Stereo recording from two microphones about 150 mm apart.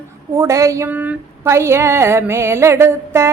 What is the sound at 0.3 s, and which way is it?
A woman's voice, 20° right (ahead or behind).